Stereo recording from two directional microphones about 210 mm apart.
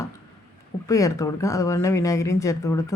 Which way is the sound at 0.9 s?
15° left (ahead or behind).